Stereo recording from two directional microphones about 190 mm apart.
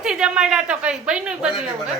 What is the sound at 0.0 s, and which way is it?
A woman's voice, 5° right (ahead or behind).